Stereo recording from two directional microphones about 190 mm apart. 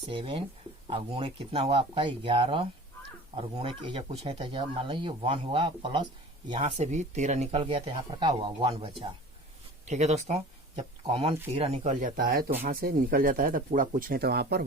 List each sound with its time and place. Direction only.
0.1 s speech: 25° right (ahead or behind)
6.6 s speech: 35° right (ahead or behind); by 14.6 s 55° right (ahead or behind)